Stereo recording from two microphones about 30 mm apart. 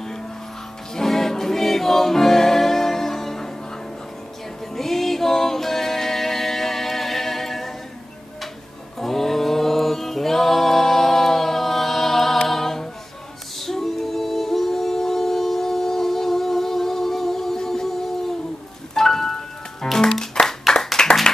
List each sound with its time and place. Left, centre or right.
0.9 s music: centre
4.7 s music: centre
9.0 s music: centre
12.4 s a capella: centre
13.6 s singing: centre
18.9 s music: centre